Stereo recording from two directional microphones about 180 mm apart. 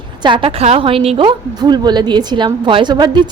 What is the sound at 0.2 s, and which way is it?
A woman's voice, 25° right (ahead or behind).